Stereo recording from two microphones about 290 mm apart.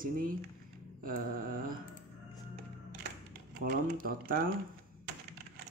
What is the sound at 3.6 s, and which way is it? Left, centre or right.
Speech, right.